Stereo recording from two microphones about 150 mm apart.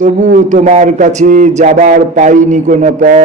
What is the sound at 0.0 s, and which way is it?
Mantra, 55° right (ahead or behind).